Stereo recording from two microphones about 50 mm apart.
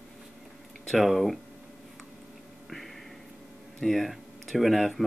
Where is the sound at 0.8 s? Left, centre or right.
Centre.